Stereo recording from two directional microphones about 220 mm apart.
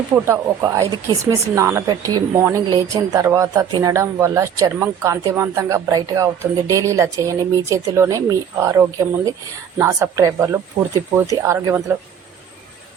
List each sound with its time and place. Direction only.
0.1 s speech: 15° right (ahead or behind)